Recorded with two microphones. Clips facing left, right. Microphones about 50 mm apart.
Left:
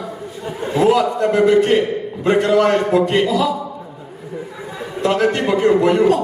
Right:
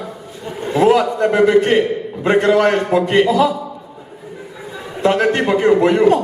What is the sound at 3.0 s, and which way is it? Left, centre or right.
Speech, right.